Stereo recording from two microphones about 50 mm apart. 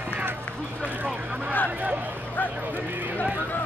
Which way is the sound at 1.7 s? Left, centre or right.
Right.